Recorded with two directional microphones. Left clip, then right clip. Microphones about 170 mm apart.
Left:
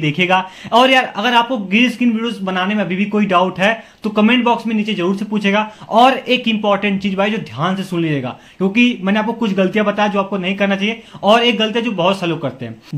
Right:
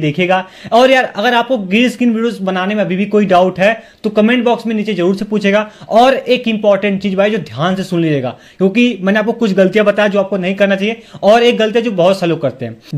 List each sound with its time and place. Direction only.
0.0 s a man's voice: 15° right (ahead or behind); by 12.5 s 35° right (ahead or behind)